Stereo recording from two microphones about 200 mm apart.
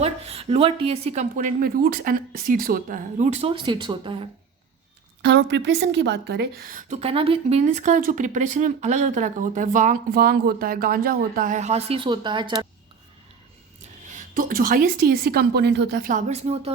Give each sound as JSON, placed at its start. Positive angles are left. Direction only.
{"t": 0.0, "sound": "a woman's voice", "side_deg": -30}
{"t": 5.2, "sound": "a woman's voice", "side_deg": -60}
{"t": 14.2, "sound": "a woman's voice", "side_deg": -40}
{"t": 16.0, "sound": "a woman's voice", "side_deg": -40}